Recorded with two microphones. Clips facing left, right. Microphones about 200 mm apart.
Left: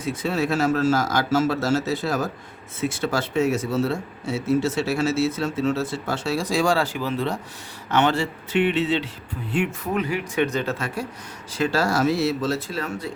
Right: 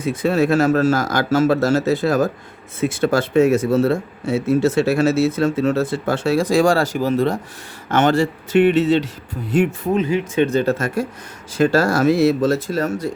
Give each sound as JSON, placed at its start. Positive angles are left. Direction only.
{"t": 0.0, "sound": "speech", "side_deg": -55}
{"t": 9.8, "sound": "speech", "side_deg": -25}